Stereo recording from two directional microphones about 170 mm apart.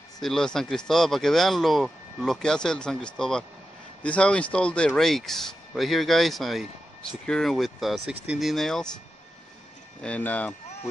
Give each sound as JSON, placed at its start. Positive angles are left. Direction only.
{"t": 0.2, "sound": "speech", "side_deg": 5}
{"t": 10.0, "sound": "speech", "side_deg": 10}